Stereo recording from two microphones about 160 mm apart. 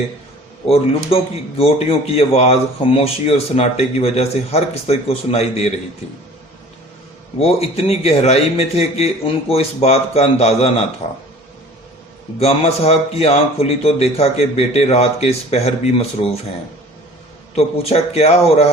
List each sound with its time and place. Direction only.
0.7 s speech: 40° left (ahead or behind)
7.3 s speech: 40° left (ahead or behind)
12.4 s speech: 40° left (ahead or behind)
17.5 s speech: 40° left (ahead or behind)